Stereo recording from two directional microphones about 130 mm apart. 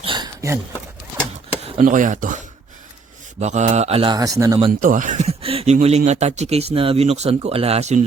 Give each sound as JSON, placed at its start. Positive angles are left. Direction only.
{"t": 0.0, "sound": "a sound", "side_deg": -40}
{"t": 0.4, "sound": "speech", "side_deg": -20}
{"t": 1.8, "sound": "speech", "side_deg": -85}
{"t": 3.4, "sound": "speech", "side_deg": -65}
{"t": 4.1, "sound": "speech", "side_deg": -25}
{"t": 4.8, "sound": "speech", "side_deg": -85}